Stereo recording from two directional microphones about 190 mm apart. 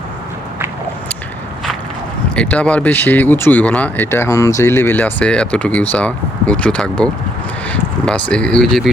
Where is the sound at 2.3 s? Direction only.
5° left (ahead or behind).